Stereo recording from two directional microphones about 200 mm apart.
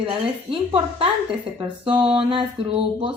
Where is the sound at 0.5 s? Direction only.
25° right (ahead or behind).